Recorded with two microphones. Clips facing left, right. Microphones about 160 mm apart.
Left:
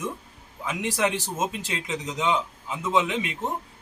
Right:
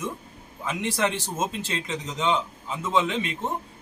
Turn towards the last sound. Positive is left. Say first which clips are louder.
# even
turn(degrees=10)  # may be behind; listen again after turning